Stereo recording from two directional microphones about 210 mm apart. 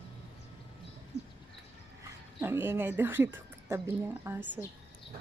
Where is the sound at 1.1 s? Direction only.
30° left (ahead or behind).